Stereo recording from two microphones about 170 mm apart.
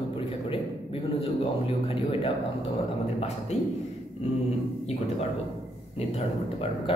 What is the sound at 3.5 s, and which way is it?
Speech, 40° left (ahead or behind).